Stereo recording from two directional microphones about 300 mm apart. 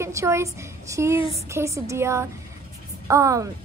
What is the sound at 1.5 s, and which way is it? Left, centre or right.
A woman's voice, centre.